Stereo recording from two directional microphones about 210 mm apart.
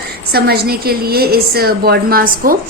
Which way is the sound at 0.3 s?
45° right (ahead or behind).